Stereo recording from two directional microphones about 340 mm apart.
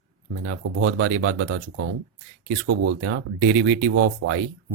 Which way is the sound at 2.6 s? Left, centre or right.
Right.